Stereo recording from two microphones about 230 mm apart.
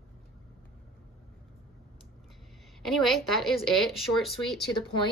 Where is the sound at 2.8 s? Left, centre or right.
Centre.